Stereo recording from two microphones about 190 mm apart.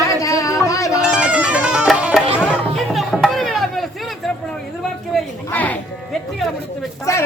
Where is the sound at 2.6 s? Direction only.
Centre (ahead or behind).